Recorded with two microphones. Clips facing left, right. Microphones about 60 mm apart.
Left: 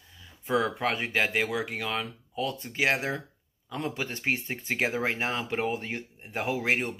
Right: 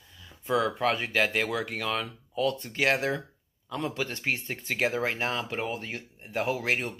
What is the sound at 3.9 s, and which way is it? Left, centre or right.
Speech, left.